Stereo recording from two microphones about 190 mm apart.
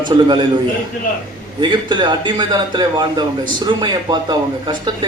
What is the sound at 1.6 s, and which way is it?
Speech, 25° right (ahead or behind).